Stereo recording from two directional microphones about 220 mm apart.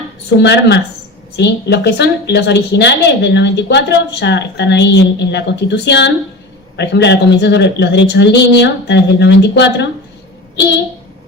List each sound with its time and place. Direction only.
0.3 s a woman's voice: 50° left (ahead or behind)